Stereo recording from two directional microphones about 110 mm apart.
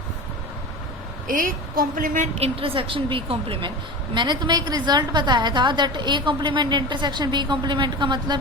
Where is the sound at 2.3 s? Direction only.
60° right (ahead or behind).